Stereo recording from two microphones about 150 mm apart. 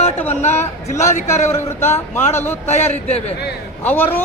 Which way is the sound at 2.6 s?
45° left (ahead or behind).